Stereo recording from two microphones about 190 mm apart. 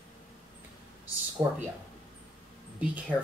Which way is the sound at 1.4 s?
20° right (ahead or behind).